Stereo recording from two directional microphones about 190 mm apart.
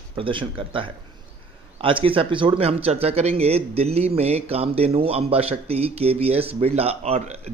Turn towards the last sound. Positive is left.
turn(degrees=-35)  # may be behind; listen again after turning